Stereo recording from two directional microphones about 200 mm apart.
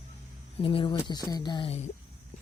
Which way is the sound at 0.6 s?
25° left (ahead or behind).